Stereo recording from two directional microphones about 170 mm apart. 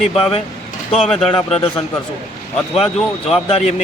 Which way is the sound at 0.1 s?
35° left (ahead or behind).